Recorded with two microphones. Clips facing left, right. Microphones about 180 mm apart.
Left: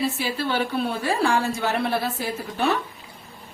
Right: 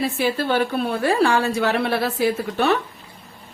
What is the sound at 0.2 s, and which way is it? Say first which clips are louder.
Speech: right 5 dB; 50° right (ahead or behind).